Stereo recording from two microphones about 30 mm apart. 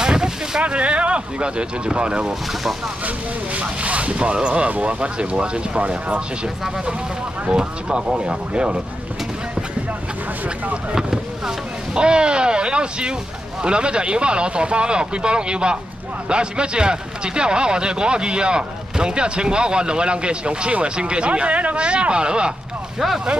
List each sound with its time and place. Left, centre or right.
0.0 s a sound: right
0.6 s speech: right
3.5 s speech: right
4.6 s speech: right
7.5 s speech: right
11.0 s speech: right
21.7 s speech: right
22.9 s speech: centre